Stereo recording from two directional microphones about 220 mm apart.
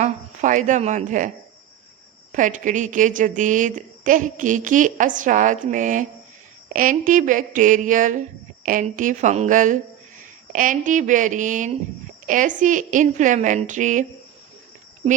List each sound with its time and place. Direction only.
0.0 s a woman's voice: 35° right (ahead or behind)
2.3 s a woman's voice: 35° right (ahead or behind)